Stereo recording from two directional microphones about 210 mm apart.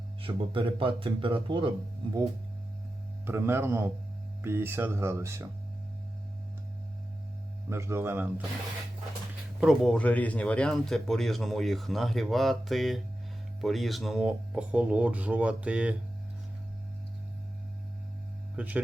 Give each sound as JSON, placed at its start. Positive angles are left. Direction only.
{"t": 0.2, "sound": "speech", "side_deg": -25}
{"t": 3.2, "sound": "speech", "side_deg": -10}
{"t": 7.7, "sound": "speech", "side_deg": -10}
{"t": 9.6, "sound": "speech", "side_deg": 0}
{"t": 18.5, "sound": "speech", "side_deg": -5}